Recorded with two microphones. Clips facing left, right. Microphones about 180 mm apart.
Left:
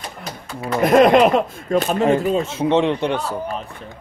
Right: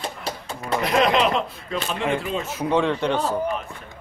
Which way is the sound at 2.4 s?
25° left (ahead or behind).